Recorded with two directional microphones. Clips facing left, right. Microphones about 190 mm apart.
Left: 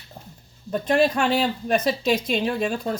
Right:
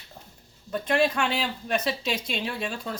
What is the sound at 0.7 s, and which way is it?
Speech, 40° left (ahead or behind).